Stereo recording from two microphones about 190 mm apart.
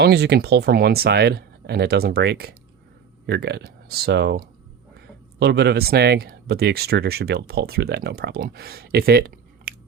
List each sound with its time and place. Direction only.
0.0 s speech: 60° right (ahead or behind)